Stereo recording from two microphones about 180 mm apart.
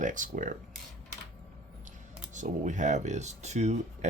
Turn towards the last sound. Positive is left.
turn(degrees=-40)  # may be behind; listen again after turning